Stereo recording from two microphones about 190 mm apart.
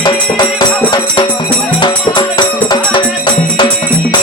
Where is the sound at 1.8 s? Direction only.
25° left (ahead or behind).